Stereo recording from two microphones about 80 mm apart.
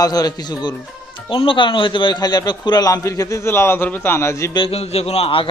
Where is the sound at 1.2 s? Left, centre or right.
Left.